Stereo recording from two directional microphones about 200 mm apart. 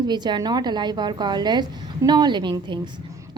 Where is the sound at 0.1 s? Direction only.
20° right (ahead or behind).